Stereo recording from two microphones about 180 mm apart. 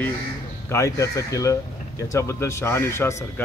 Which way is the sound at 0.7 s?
15° left (ahead or behind).